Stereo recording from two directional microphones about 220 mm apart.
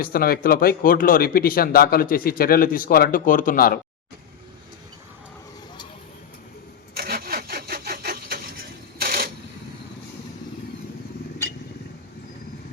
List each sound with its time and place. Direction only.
0.0 s speech: 40° left (ahead or behind)
6.9 s sawing: 45° right (ahead or behind)
9.0 s a sound: 45° right (ahead or behind)